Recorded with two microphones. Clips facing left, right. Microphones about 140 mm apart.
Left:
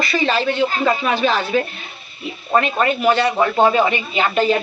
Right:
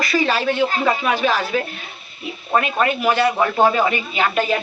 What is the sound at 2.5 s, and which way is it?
A woman's voice, 5° right (ahead or behind).